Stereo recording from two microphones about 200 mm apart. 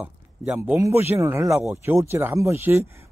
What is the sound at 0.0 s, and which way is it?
Speech, 5° right (ahead or behind).